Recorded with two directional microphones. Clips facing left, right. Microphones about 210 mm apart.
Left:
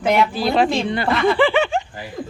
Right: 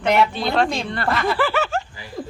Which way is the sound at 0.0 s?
5° left (ahead or behind).